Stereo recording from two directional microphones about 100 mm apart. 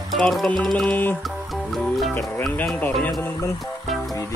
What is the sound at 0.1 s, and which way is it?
Music, centre (ahead or behind).